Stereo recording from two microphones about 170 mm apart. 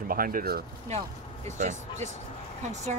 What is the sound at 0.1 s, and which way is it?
Speech, 55° right (ahead or behind).